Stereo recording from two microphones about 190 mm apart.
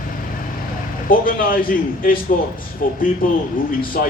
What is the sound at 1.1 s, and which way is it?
A man's voice, 50° left (ahead or behind).